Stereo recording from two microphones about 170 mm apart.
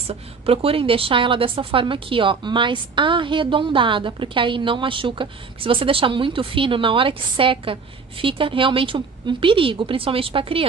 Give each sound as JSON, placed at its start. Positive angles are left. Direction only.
{"t": 0.0, "sound": "a woman's voice", "side_deg": -35}